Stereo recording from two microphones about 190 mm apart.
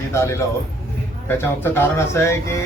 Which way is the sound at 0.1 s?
15° left (ahead or behind).